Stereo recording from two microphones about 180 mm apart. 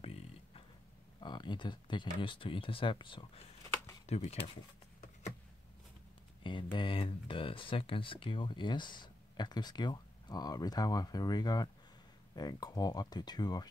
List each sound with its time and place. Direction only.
0.0 s a sound: 30° left (ahead or behind)
1.2 s speech: 25° left (ahead or behind)
6.4 s speech: 25° left (ahead or behind)